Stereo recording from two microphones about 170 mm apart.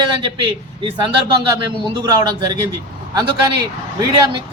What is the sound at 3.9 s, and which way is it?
Speech, 25° right (ahead or behind).